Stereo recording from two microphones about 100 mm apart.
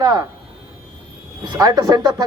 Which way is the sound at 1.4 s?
40° right (ahead or behind).